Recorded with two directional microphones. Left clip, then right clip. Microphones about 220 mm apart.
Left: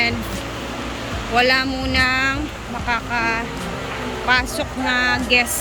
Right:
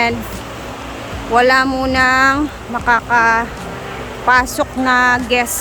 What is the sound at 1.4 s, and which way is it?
Speech, 20° right (ahead or behind).